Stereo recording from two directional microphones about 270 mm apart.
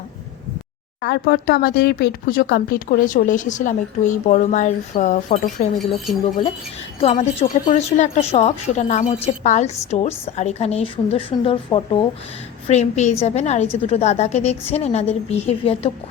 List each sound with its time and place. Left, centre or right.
1.0 s speech: left
5.8 s speech: centre
7.0 s speech: left